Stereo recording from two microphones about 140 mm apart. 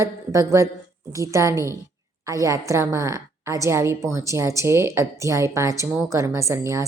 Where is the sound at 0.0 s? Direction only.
20° right (ahead or behind).